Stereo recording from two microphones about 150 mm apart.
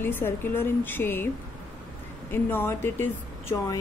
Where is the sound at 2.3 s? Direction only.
15° left (ahead or behind).